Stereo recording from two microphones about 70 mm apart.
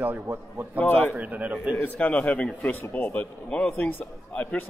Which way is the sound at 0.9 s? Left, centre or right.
Left.